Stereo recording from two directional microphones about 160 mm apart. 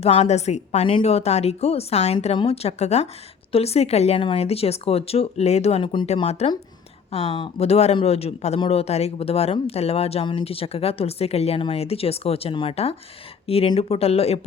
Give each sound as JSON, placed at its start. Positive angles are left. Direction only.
{"t": 0.0, "sound": "speech", "side_deg": 40}